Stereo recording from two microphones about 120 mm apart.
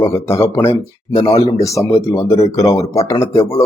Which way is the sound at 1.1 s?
35° left (ahead or behind).